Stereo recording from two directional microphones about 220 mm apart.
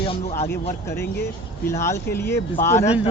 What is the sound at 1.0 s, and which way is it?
Speech, 50° left (ahead or behind).